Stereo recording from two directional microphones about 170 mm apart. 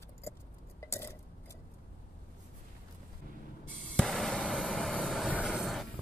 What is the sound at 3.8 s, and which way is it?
Vehicle, centre (ahead or behind).